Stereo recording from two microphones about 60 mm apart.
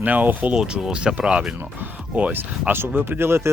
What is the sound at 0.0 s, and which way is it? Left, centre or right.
Speech, right.